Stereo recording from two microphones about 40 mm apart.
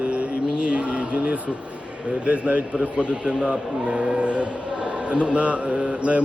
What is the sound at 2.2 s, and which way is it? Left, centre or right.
A man's voice, right.